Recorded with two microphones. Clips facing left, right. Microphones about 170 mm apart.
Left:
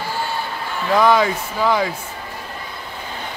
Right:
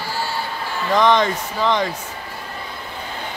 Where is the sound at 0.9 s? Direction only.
5° left (ahead or behind).